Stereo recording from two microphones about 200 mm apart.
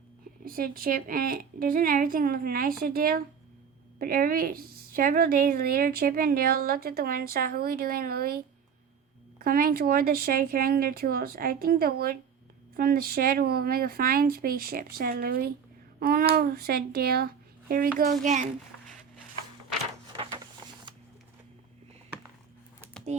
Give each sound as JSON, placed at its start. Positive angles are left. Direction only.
{"t": 0.4, "sound": "a woman's voice", "side_deg": -45}
{"t": 9.4, "sound": "a woman's voice", "side_deg": -45}
{"t": 20.9, "sound": "a sound", "side_deg": -25}